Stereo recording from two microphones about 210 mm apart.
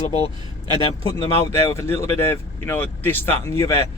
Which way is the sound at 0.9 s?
20° left (ahead or behind).